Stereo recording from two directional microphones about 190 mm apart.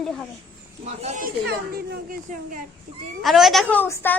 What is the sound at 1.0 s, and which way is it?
Speech, 40° right (ahead or behind).